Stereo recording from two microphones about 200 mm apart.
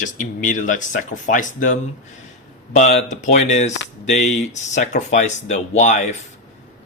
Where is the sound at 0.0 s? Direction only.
40° left (ahead or behind).